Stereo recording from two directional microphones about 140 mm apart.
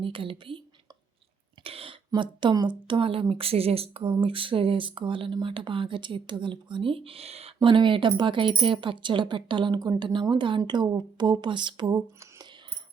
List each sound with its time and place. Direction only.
0.0 s speech: 40° right (ahead or behind)
1.6 s a sound: 40° right (ahead or behind)
2.0 s speech: 35° right (ahead or behind)